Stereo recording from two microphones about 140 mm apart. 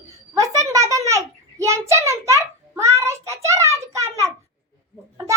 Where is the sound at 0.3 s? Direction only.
25° right (ahead or behind).